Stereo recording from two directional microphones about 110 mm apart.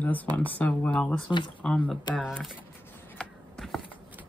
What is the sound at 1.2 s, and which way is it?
Speech, 45° left (ahead or behind).